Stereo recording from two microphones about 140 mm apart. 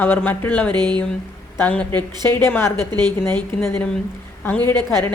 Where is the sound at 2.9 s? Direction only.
30° right (ahead or behind).